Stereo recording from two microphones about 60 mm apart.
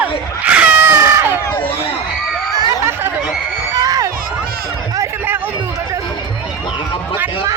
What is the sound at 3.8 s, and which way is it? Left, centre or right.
Crowd, right.